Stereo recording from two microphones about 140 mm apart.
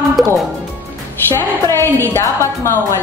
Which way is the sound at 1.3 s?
20° left (ahead or behind).